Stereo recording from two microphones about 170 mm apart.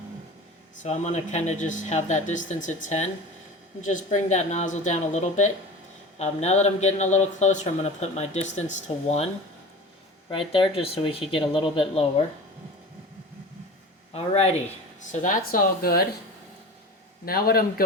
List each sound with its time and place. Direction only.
0.8 s speech: 45° left (ahead or behind)
14.1 s speech: 35° left (ahead or behind)
15.1 s speech: 50° left (ahead or behind)
17.2 s speech: 60° left (ahead or behind)